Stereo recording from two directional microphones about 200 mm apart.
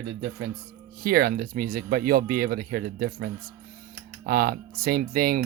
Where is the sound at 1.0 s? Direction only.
45° right (ahead or behind).